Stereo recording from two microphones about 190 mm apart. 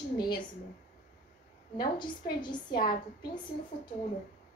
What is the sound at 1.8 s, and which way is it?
A woman's voice, 25° left (ahead or behind).